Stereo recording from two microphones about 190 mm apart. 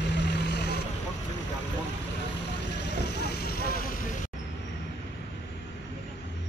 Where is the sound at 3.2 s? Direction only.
55° left (ahead or behind).